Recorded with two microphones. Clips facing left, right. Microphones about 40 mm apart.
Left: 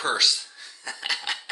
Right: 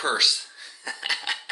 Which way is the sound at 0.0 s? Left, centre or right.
Centre.